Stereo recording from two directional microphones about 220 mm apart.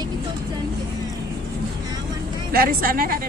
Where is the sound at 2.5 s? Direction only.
40° right (ahead or behind).